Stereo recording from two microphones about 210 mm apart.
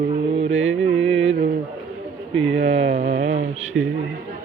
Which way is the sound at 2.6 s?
30° right (ahead or behind).